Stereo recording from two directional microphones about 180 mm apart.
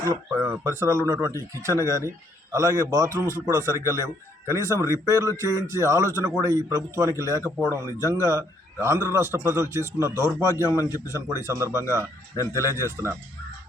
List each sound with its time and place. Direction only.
0.0 s a man's voice: 15° right (ahead or behind)
12.8 s a man's voice: 15° right (ahead or behind)